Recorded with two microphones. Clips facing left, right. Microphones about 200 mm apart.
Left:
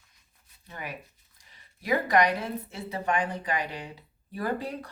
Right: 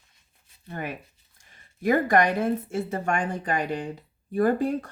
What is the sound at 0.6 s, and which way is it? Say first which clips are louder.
Speech: right 6 dB; 50° right (ahead or behind).